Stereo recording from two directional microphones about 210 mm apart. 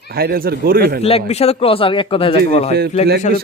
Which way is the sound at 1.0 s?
30° left (ahead or behind).